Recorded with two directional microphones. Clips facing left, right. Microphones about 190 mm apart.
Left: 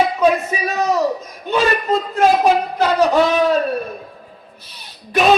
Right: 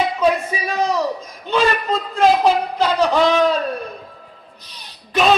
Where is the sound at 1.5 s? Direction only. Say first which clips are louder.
Left 1 dB; 15° left (ahead or behind).